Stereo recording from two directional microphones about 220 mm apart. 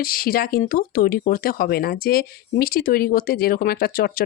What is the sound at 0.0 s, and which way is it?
Speech, 40° left (ahead or behind).